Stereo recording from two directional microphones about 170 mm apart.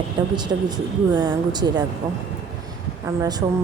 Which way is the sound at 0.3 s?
25° right (ahead or behind).